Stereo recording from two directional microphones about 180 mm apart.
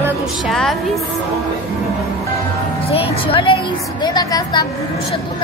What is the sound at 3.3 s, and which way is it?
A woman's voice, 30° left (ahead or behind).